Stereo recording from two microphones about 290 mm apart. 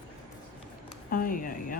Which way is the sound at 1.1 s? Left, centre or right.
Left.